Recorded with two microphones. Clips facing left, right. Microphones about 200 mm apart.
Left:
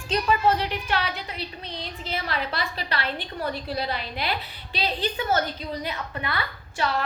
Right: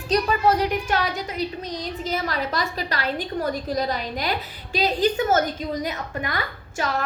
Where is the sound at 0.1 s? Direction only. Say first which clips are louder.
Right 2 dB; 40° right (ahead or behind).